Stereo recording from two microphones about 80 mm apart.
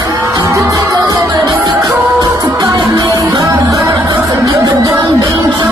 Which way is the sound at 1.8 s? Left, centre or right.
Right.